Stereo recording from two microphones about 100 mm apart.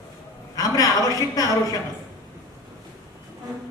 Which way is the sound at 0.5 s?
35° left (ahead or behind).